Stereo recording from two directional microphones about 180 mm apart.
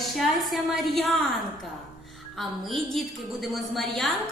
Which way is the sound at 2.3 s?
Centre (ahead or behind).